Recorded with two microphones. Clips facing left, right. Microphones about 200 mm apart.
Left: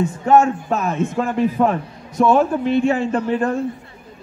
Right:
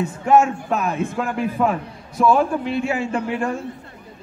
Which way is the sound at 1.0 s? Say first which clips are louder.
Left 4 dB; 20° left (ahead or behind).